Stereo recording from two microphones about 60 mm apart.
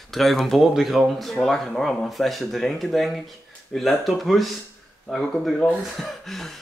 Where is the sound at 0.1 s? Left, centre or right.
Centre.